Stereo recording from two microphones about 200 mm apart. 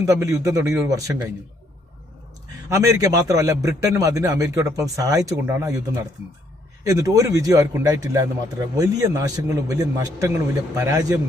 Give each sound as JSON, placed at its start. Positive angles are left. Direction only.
{"t": 0.0, "sound": "a man's voice", "side_deg": -15}
{"t": 2.6, "sound": "a man's voice", "side_deg": -15}